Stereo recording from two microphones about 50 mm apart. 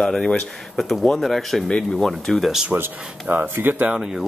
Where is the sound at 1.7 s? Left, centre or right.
Centre.